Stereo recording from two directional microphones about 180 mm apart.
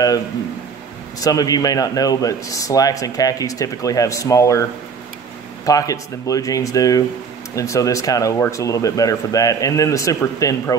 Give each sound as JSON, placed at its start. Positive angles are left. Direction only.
{"t": 1.2, "sound": "a man's voice", "side_deg": 20}
{"t": 5.7, "sound": "a man's voice", "side_deg": 20}